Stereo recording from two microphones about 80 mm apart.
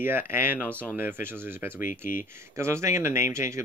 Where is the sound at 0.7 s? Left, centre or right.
Centre.